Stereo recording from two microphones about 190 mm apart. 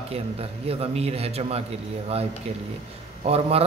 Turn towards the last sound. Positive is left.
turn(degrees=-30)  # may be behind; listen again after turning